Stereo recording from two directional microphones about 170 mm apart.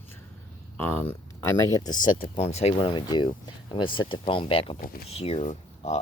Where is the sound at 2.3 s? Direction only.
40° left (ahead or behind).